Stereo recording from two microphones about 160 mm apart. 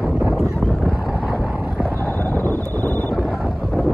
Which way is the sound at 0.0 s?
Centre (ahead or behind).